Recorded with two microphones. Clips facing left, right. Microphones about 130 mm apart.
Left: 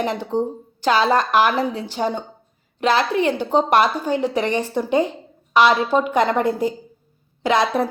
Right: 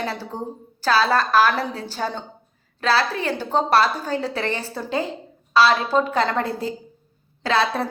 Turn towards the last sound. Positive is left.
turn(degrees=15)  # may be behind; listen again after turning